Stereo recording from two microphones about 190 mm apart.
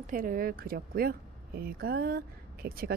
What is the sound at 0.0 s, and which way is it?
Speech, 45° right (ahead or behind).